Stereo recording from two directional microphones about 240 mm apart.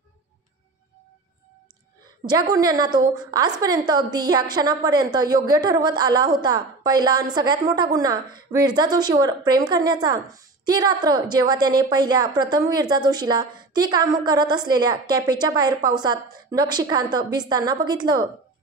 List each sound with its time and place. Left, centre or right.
2.2 s a woman's voice: centre